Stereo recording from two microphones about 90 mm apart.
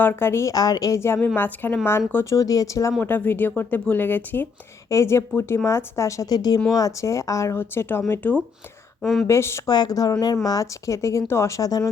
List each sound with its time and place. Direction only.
0.0 s speech: 25° left (ahead or behind)
0.5 s speech: 45° left (ahead or behind)
3.0 s speech: 20° left (ahead or behind)
4.9 s speech: 35° left (ahead or behind)
9.0 s speech: centre (ahead or behind)
9.2 s speech: 30° left (ahead or behind)
9.6 s speech: 50° left (ahead or behind)